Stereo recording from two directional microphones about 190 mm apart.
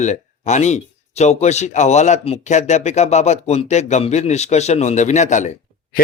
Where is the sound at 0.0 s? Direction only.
40° left (ahead or behind).